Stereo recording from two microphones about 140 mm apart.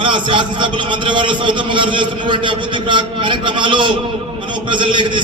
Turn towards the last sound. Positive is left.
turn(degrees=-35)  # may be behind; listen again after turning